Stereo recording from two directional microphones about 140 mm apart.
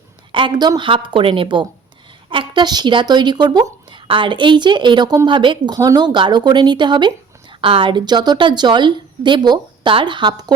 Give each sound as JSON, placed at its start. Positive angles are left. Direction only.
{"t": 0.3, "sound": "speech", "side_deg": -35}